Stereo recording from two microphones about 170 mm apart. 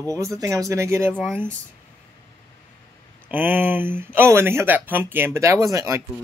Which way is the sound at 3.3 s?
10° right (ahead or behind).